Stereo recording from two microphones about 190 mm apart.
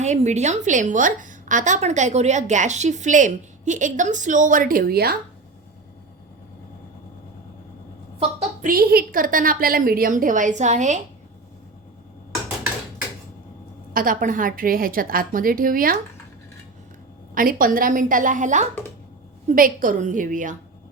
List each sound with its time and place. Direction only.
0.0 s a woman's voice: 35° right (ahead or behind); by 5.1 s 55° right (ahead or behind)
8.4 s a woman's voice: 45° right (ahead or behind)
13.9 s a woman's voice: 45° right (ahead or behind)
17.3 s a woman's voice: 50° right (ahead or behind)